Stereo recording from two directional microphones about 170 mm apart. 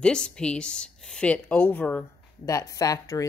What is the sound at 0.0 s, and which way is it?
A woman's voice, 5° left (ahead or behind).